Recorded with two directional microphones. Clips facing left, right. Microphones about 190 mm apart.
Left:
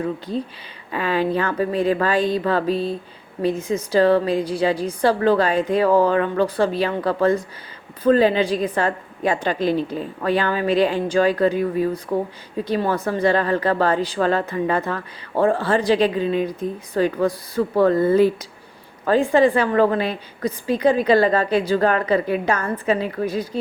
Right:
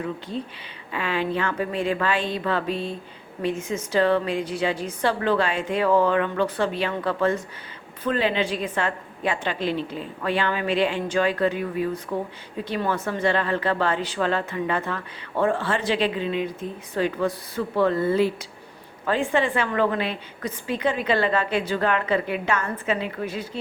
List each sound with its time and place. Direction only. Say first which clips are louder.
0.0 s a woman's voice: left 5 dB; 40° left (ahead or behind)